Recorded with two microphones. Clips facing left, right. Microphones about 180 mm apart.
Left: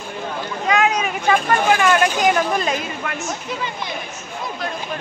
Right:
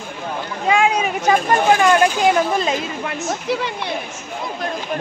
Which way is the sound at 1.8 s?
30° right (ahead or behind).